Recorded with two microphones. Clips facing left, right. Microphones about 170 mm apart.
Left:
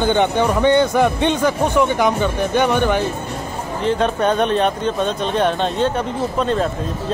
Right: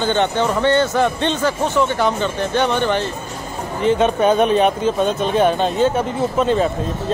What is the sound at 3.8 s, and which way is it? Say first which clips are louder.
Speech: right 3 dB; 5° right (ahead or behind).